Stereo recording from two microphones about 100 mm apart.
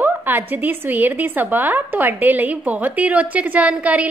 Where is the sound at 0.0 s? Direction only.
20° right (ahead or behind).